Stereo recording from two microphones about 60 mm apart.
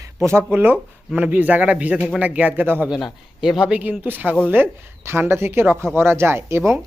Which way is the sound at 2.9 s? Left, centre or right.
Centre.